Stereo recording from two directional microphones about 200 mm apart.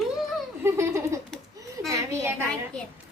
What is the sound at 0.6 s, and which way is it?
Baby laughter, 15° right (ahead or behind).